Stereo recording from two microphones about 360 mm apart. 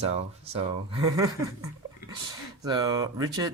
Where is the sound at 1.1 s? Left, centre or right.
Centre.